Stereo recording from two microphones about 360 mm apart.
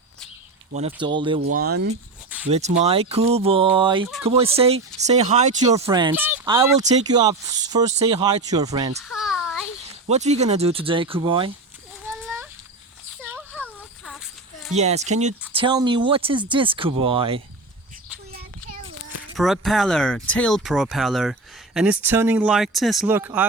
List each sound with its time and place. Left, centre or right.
0.7 s speech: centre
1.5 s speech: right; by 9.0 s centre
9.0 s a sound: centre
10.1 s speech: centre
12.0 s a sound: centre
14.8 s speech: centre
19.4 s speech: centre